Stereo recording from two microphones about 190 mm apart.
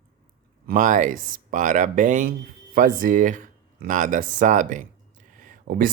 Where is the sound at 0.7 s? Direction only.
40° right (ahead or behind).